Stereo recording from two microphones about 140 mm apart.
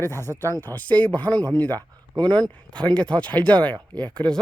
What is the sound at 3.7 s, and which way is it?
Speech, 30° right (ahead or behind).